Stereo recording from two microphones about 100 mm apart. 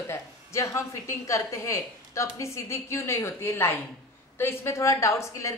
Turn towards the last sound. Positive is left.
turn(degrees=30)  # may be behind; listen again after turning